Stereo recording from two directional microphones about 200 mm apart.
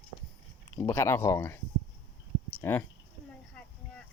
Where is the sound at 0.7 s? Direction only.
15° left (ahead or behind).